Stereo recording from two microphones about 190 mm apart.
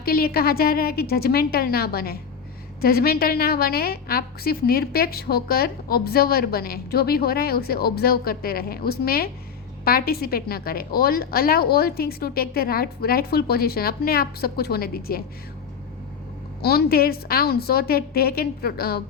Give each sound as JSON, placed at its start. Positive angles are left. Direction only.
{"t": 0.0, "sound": "a woman's voice", "side_deg": 50}
{"t": 16.6, "sound": "a woman's voice", "side_deg": 55}